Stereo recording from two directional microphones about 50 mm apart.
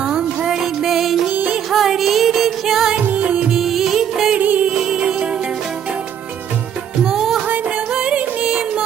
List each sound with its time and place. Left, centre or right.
0.4 s music: centre
3.2 s music: right
3.5 s music: centre
4.4 s music: right
4.7 s music: centre
7.0 s music: centre
8.0 s music: right